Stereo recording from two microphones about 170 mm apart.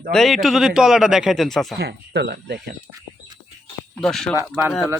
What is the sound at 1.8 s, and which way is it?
Speech, 75° right (ahead or behind).